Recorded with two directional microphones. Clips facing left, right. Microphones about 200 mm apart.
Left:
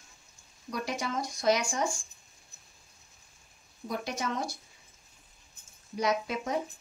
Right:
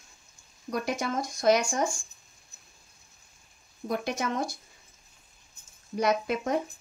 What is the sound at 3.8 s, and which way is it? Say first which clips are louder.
Speech: right 4 dB; 55° right (ahead or behind).